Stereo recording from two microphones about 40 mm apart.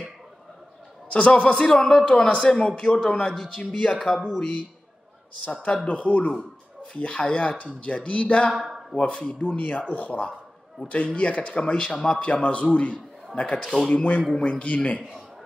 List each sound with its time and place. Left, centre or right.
1.0 s a man's voice: left
1.7 s a man's voice: centre
8.5 s speech: centre
8.9 s speech: left
9.4 s speech: left